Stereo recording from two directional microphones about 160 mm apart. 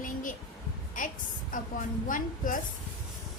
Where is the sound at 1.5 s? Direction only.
55° left (ahead or behind).